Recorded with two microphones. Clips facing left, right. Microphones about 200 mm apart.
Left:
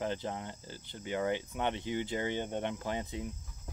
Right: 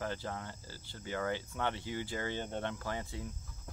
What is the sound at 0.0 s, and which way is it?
Cricket, 20° left (ahead or behind).